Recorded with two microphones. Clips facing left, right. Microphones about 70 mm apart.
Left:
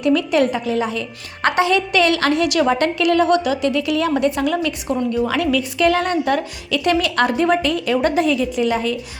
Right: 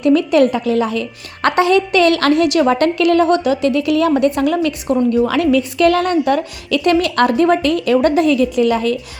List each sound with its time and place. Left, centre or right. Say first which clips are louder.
0.0 s a woman's voice: right 4 dB; right
3.7 s a woman's voice: right 5 dB; right